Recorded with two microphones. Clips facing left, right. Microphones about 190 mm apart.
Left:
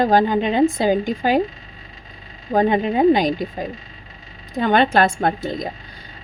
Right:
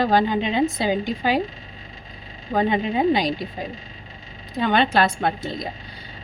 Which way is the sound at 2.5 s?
45° left (ahead or behind).